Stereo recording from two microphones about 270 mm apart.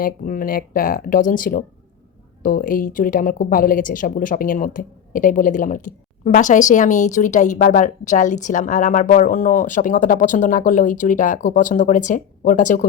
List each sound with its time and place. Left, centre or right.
0.0 s a woman's voice: left